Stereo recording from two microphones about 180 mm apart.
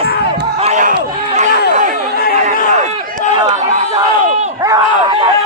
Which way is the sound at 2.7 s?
40° right (ahead or behind).